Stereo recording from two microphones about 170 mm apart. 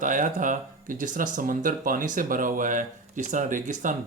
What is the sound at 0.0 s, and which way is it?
Speech, 50° right (ahead or behind).